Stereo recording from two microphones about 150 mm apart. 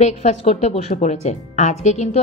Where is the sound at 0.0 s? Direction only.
45° left (ahead or behind).